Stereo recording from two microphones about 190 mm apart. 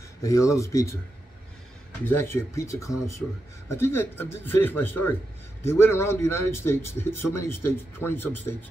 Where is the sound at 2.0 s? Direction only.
15° left (ahead or behind).